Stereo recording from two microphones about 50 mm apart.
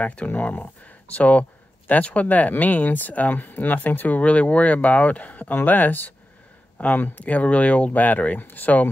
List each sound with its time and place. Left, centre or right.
0.0 s speech: left
4.2 s speech: left